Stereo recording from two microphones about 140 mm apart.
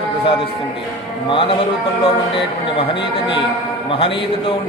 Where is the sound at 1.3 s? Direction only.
40° left (ahead or behind).